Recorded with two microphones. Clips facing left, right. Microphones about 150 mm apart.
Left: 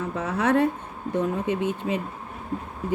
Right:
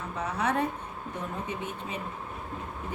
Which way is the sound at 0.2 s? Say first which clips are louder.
Left 7 dB; 90° left.